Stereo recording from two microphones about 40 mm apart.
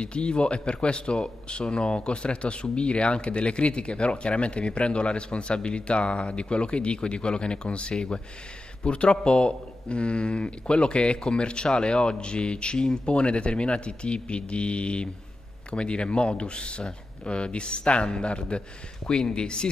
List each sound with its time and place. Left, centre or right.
0.0 s a man's voice: left